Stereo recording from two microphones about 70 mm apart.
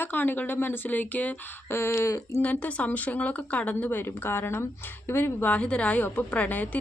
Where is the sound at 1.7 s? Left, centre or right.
Left.